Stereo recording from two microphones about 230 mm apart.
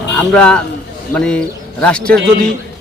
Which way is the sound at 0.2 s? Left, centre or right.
Centre.